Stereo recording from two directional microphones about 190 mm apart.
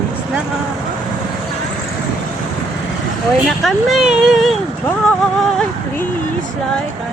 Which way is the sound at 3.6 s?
Centre (ahead or behind).